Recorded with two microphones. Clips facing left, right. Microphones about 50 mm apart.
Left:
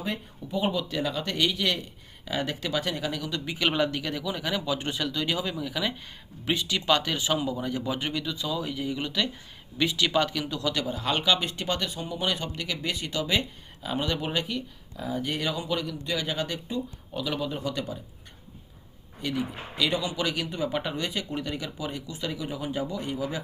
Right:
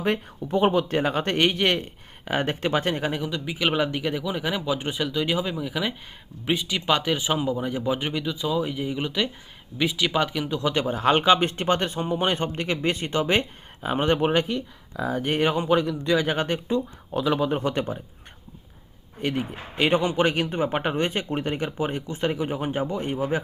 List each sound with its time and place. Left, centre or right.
0.0 s speech: right
3.2 s speech: centre
10.8 s a man's voice: right
19.2 s a man's voice: right